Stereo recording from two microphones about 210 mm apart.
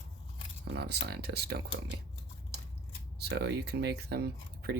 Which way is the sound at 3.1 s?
50° right (ahead or behind).